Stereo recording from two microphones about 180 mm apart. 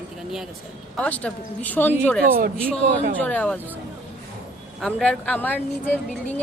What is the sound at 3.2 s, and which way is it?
Speech, 10° left (ahead or behind).